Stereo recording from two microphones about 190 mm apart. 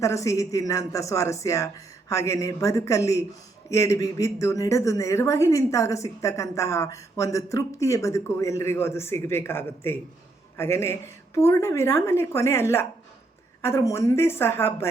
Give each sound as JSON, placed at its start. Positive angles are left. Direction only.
{"t": 0.0, "sound": "speech", "side_deg": 15}